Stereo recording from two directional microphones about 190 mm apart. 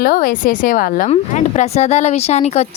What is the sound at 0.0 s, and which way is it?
A woman's voice, 45° left (ahead or behind).